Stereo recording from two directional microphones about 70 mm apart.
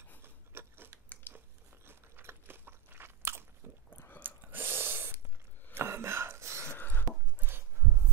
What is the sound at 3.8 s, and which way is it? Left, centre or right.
Chewing, left.